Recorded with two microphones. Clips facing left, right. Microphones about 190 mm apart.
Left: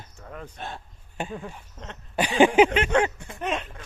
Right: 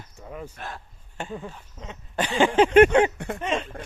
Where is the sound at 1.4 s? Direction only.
10° left (ahead or behind).